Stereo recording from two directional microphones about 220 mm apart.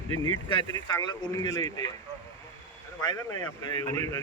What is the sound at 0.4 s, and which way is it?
A man's voice, 20° left (ahead or behind).